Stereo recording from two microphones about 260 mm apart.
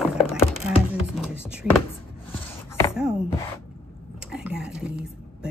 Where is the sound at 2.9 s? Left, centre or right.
Centre.